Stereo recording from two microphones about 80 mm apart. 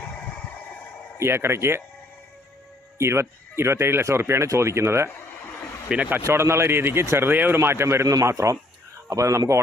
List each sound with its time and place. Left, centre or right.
1.2 s speech: right
3.0 s speech: right
5.9 s a man's voice: centre
6.2 s speech: right